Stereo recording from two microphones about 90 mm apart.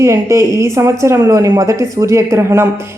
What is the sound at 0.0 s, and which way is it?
A woman's voice, 30° right (ahead or behind).